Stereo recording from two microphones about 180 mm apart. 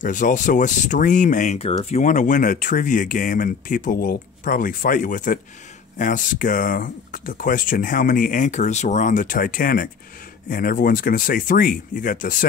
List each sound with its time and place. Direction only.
0.0 s speech: 45° left (ahead or behind)